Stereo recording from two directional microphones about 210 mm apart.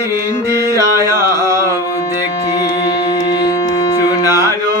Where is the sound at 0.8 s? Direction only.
15° right (ahead or behind).